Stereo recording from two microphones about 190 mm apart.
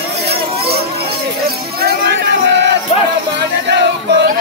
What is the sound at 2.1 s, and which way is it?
Music, 65° right (ahead or behind).